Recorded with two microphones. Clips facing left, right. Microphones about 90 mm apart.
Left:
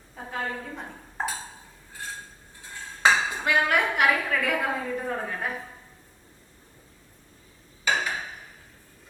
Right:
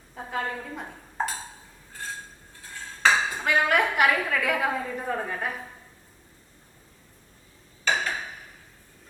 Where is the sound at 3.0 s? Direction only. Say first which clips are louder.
Even; centre (ahead or behind).